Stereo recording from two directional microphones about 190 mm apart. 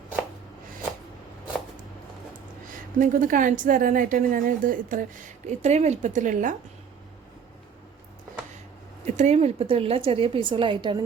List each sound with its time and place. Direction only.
3.0 s a woman's voice: 45° right (ahead or behind)
9.0 s a woman's voice: 35° right (ahead or behind)